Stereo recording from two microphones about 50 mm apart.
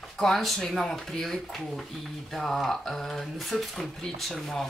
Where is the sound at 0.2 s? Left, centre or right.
Centre.